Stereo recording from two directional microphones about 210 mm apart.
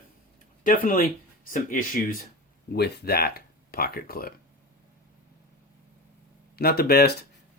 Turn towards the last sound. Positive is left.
turn(degrees=50)  # may be behind; listen again after turning